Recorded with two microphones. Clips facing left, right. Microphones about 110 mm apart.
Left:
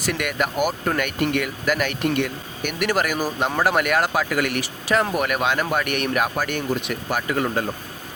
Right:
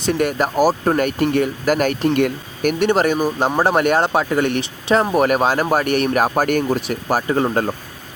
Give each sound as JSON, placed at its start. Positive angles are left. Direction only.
{"t": 0.0, "sound": "speech", "side_deg": -35}
{"t": 2.7, "sound": "speech", "side_deg": -30}